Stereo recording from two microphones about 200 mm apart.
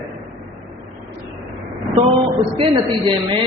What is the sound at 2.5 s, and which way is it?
Speech, 25° right (ahead or behind).